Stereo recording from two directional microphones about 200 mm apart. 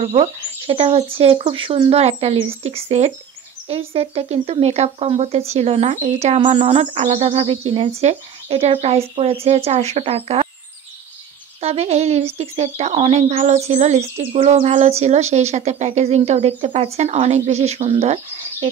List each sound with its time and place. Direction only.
0.0 s speech: 30° right (ahead or behind)
11.6 s speech: 30° right (ahead or behind)